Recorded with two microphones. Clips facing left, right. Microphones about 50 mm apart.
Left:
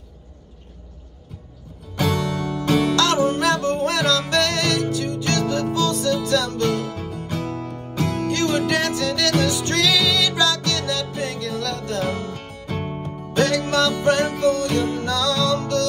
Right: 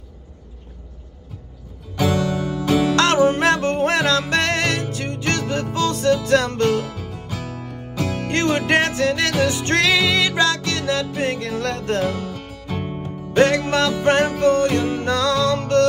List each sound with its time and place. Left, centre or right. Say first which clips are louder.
2.0 s music: right 2 dB; centre
3.2 s music: right 3 dB; right
6.9 s music: left 2 dB; centre
7.2 s music: left 5 dB; right
12.1 s music: even; centre
13.3 s music: right 3 dB; right